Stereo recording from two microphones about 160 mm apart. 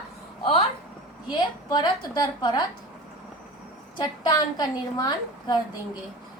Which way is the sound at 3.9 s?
25° left (ahead or behind).